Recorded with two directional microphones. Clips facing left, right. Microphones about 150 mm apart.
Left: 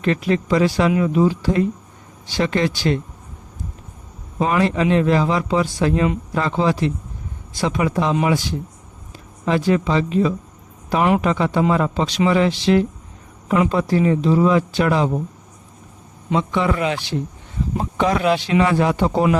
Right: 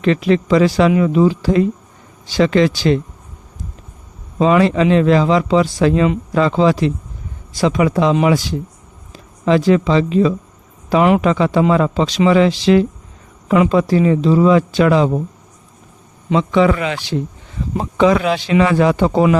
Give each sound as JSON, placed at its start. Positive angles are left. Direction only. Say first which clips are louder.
{"t": 0.0, "sound": "a man's voice", "louder": "right 5 dB", "side_deg": -90}
{"t": 4.4, "sound": "a man's voice", "louder": "right 5 dB", "side_deg": -90}
{"t": 16.3, "sound": "a man's voice", "louder": "right 6 dB", "side_deg": -90}